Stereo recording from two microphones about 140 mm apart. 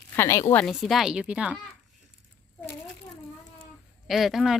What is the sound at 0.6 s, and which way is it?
A woman's voice, centre (ahead or behind).